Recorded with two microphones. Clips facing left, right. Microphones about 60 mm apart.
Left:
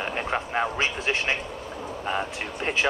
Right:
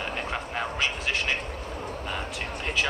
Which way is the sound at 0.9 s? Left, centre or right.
Left.